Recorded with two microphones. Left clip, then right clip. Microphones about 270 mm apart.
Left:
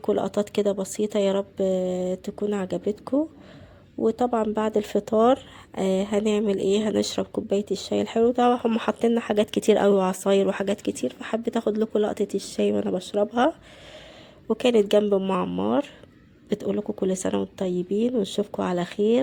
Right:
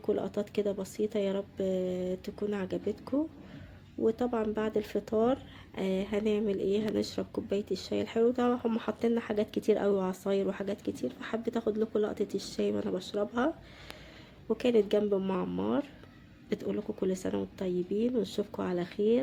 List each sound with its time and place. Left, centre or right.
0.0 s speech: left